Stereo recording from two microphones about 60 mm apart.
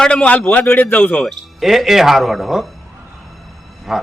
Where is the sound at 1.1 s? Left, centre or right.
Centre.